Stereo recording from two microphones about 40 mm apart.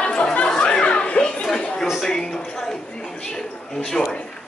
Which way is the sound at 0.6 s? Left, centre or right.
Left.